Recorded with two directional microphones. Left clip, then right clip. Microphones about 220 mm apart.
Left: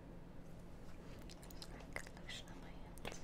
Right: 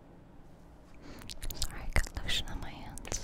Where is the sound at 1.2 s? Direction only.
45° right (ahead or behind).